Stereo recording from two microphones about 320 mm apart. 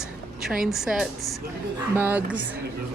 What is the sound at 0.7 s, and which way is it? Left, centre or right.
A woman's voice, centre.